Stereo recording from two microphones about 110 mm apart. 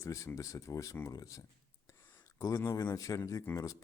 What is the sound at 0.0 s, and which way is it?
Speech, 30° left (ahead or behind).